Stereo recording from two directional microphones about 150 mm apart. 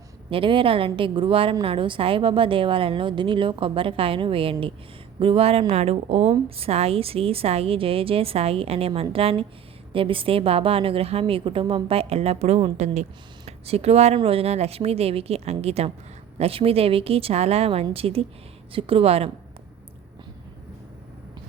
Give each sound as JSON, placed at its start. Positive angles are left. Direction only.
{"t": 0.3, "sound": "a woman's voice", "side_deg": -35}